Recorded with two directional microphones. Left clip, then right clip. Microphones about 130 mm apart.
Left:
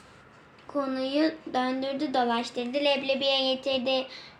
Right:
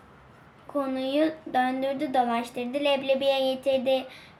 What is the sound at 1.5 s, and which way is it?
A woman's voice, 70° right (ahead or behind).